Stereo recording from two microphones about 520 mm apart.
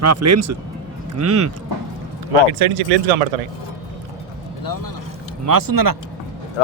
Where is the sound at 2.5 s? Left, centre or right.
Right.